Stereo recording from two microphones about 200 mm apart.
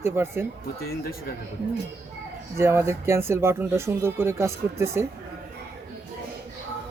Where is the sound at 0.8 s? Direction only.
50° left (ahead or behind).